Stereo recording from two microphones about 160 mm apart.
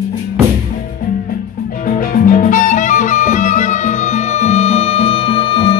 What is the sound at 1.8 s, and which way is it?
Music, 55° left (ahead or behind).